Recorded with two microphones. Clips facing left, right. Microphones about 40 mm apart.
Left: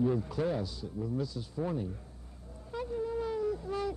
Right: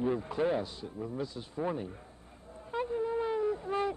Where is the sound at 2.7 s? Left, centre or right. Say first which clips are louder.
Right 3 dB; right.